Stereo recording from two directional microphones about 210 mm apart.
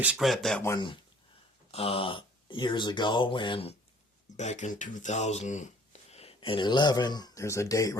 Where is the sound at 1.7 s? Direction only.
25° left (ahead or behind).